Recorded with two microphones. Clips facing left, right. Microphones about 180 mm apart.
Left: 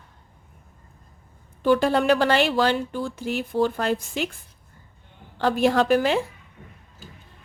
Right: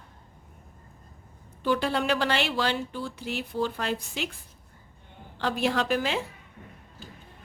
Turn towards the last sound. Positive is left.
turn(degrees=50)  # may be behind; listen again after turning